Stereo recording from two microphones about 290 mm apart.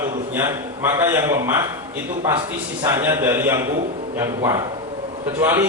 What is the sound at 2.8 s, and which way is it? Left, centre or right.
Speech, centre.